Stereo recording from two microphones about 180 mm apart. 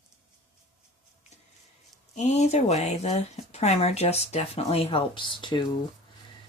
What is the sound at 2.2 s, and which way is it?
Speech, 40° left (ahead or behind).